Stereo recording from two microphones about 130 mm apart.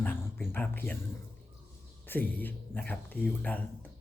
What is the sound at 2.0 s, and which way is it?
Speech, 15° left (ahead or behind).